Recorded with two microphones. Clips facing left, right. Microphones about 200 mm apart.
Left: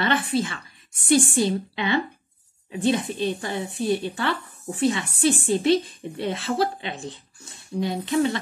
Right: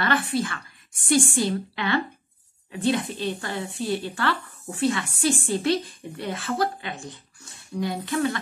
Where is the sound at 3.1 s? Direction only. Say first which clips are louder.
Left 3 dB; 20° left (ahead or behind).